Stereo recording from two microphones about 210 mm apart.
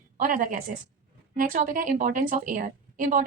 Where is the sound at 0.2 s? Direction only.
40° right (ahead or behind).